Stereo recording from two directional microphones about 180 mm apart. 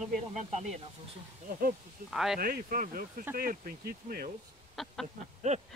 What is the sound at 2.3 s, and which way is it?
Speech, 55° right (ahead or behind).